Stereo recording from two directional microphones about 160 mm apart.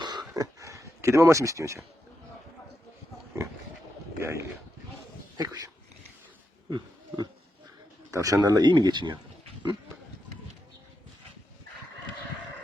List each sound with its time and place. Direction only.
0.0 s a sound: 25° right (ahead or behind)
3.3 s pig: 15° right (ahead or behind)
4.2 s speech: 15° right (ahead or behind)
6.7 s pig: 25° right (ahead or behind)
8.1 s speech: 20° right (ahead or behind)